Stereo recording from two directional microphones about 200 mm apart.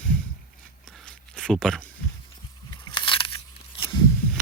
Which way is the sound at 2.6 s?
25° left (ahead or behind).